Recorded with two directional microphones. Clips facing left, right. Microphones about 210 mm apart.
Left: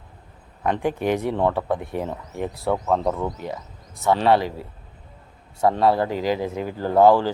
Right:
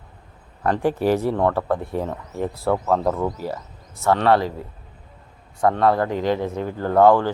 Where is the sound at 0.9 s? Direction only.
35° right (ahead or behind).